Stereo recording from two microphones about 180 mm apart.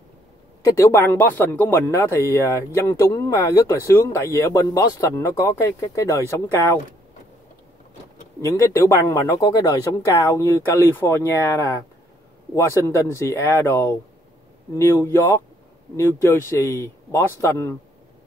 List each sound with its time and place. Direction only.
0.7 s speech: 15° left (ahead or behind)
8.4 s speech: 15° left (ahead or behind)